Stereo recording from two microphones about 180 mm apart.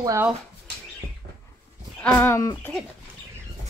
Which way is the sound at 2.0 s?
10° left (ahead or behind).